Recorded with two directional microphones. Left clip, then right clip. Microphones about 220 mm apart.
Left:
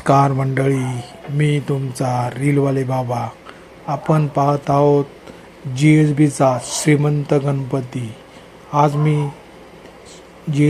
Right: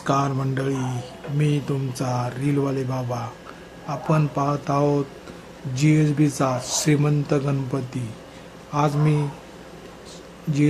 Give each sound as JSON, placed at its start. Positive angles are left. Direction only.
{"t": 0.0, "sound": "mantra", "side_deg": 20}
{"t": 1.4, "sound": "speech", "side_deg": 15}